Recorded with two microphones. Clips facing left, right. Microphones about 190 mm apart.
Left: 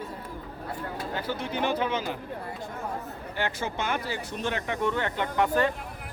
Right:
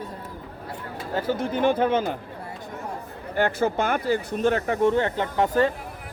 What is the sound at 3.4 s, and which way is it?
A man's voice, 55° right (ahead or behind).